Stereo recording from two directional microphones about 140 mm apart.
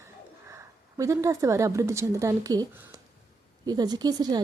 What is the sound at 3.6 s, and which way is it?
Speech, 30° right (ahead or behind).